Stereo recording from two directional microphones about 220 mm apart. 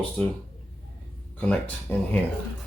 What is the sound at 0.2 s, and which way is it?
Speech, 5° left (ahead or behind).